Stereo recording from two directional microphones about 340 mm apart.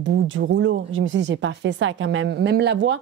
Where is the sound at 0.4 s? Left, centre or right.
Right.